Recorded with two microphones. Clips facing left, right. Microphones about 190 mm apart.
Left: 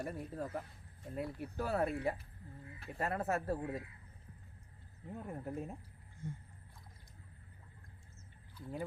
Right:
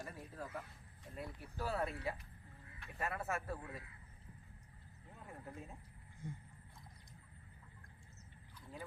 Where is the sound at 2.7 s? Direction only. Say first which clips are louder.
Left 5 dB; 35° left (ahead or behind).